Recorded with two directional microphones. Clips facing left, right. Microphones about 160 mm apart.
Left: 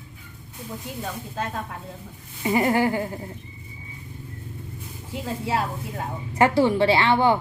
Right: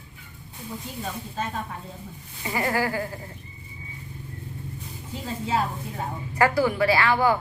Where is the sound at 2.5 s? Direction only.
20° left (ahead or behind).